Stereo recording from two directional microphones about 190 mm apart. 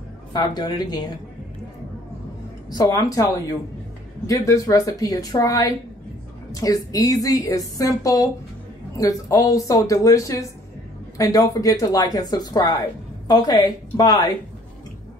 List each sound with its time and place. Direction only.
0.3 s a woman's voice: 20° left (ahead or behind)
2.7 s speech: 20° left (ahead or behind)
4.3 s a woman's voice: 15° left (ahead or behind)